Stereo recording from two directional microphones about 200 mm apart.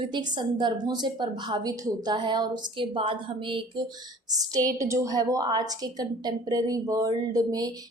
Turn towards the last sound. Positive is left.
turn(degrees=-20)  # may be behind; listen again after turning